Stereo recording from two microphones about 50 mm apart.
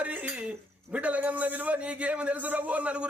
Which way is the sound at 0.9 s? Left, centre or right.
Right.